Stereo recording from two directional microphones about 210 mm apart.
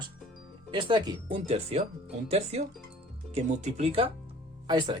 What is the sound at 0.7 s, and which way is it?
Speech, 20° right (ahead or behind).